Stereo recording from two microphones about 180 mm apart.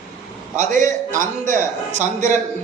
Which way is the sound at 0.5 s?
45° right (ahead or behind).